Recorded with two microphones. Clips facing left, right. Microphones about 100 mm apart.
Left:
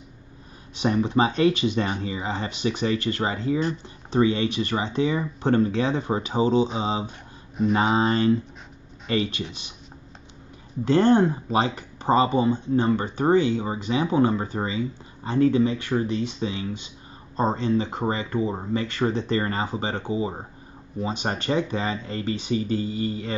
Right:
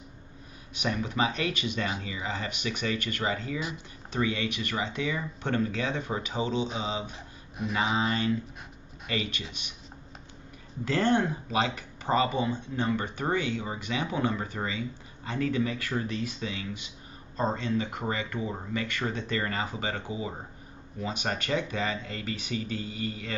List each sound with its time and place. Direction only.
0.7 s speech: 30° left (ahead or behind)
10.9 s speech: 30° left (ahead or behind)